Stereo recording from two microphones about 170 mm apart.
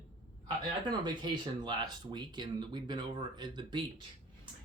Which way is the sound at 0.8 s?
25° right (ahead or behind).